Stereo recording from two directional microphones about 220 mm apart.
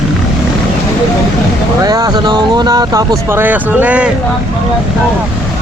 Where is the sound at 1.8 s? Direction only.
15° right (ahead or behind).